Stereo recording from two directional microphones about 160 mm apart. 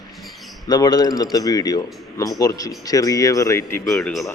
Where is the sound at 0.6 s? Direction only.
25° left (ahead or behind).